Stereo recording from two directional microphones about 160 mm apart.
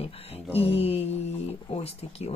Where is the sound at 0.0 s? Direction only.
40° left (ahead or behind).